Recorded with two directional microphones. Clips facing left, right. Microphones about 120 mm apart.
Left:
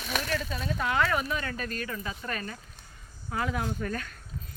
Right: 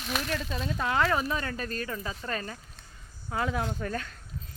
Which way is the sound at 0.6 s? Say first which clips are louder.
Right 1 dB; 30° right (ahead or behind).